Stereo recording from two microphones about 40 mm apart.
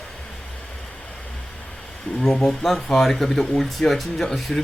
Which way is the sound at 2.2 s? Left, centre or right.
Centre.